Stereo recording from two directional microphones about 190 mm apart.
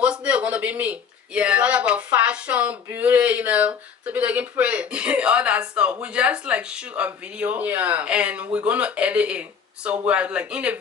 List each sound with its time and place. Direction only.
0.0 s a man's voice: 5° right (ahead or behind)